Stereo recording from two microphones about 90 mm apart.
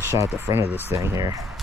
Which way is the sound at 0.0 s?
35° right (ahead or behind).